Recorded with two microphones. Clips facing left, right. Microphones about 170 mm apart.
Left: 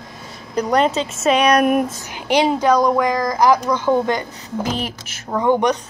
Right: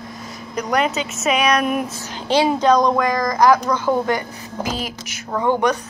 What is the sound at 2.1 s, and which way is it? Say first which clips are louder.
Speech: even; 15° left (ahead or behind).